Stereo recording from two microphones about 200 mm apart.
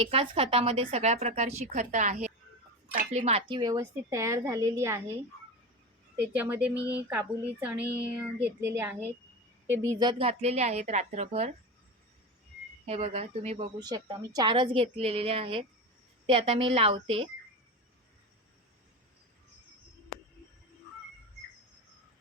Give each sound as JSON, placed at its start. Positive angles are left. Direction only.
{"t": 0.0, "sound": "a woman's voice", "side_deg": -30}
{"t": 3.6, "sound": "a woman's voice", "side_deg": -15}
{"t": 6.3, "sound": "a woman's voice", "side_deg": -10}
{"t": 12.8, "sound": "a woman's voice", "side_deg": -30}
{"t": 13.7, "sound": "a woman's voice", "side_deg": -20}